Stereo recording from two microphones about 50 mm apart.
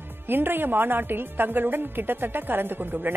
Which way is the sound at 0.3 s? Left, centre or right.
Right.